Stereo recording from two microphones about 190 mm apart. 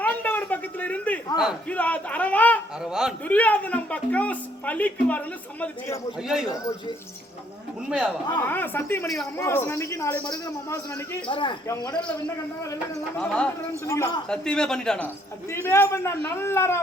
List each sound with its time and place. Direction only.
0.0 s a sound: 10° left (ahead or behind)
1.6 s speech: 10° left (ahead or behind)
2.8 s a man's voice: 5° right (ahead or behind)
3.2 s speech: 10° left (ahead or behind)
7.9 s a man's voice: 5° right (ahead or behind)
8.4 s speech: 10° left (ahead or behind)
13.1 s a man's voice: 5° left (ahead or behind)
13.8 s speech: 15° left (ahead or behind)
14.3 s a man's voice: 5° left (ahead or behind)
15.4 s speech: 15° left (ahead or behind)